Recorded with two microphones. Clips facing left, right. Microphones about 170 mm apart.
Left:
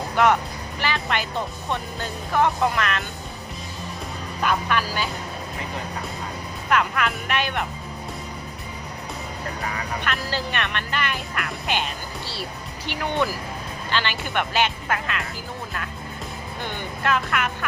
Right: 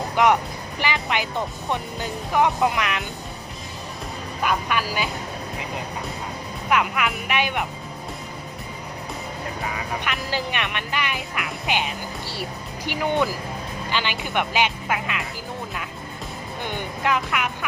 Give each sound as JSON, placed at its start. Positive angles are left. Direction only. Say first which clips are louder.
{"t": 0.2, "sound": "speech", "louder": "right 1 dB", "side_deg": -15}
{"t": 4.4, "sound": "speech", "louder": "left 1 dB", "side_deg": -10}
{"t": 6.7, "sound": "speech", "louder": "even", "side_deg": -10}
{"t": 10.0, "sound": "speech", "louder": "left 1 dB", "side_deg": -15}
{"t": 16.6, "sound": "speech", "louder": "right 1 dB", "side_deg": -15}